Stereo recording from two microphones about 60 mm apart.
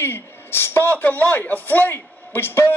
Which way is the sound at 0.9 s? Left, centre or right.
Left.